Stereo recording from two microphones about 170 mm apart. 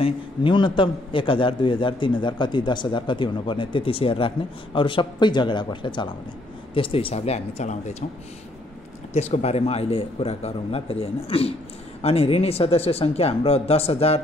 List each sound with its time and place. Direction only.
0.0 s a man's voice: 30° left (ahead or behind)
9.1 s a man's voice: 40° left (ahead or behind)